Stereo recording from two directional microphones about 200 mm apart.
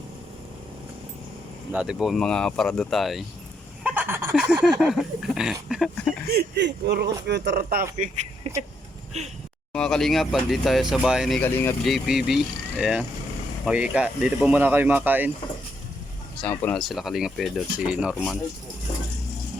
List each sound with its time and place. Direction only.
1.7 s speech: 5° right (ahead or behind)
3.8 s fowl: 10° right (ahead or behind)
4.4 s speech: 5° right (ahead or behind)
6.2 s speech: 50° right (ahead or behind)
8.4 s speech: 30° right (ahead or behind)
9.7 s speech: centre (ahead or behind)
11.9 s speech: centre (ahead or behind)
16.4 s speech: 10° left (ahead or behind)